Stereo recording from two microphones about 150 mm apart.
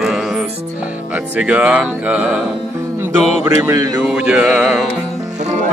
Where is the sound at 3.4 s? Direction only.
15° right (ahead or behind).